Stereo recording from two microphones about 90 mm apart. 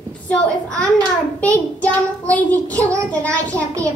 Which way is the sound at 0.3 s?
15° left (ahead or behind).